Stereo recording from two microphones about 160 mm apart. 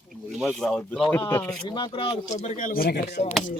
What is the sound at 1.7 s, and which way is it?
Speech, 30° left (ahead or behind).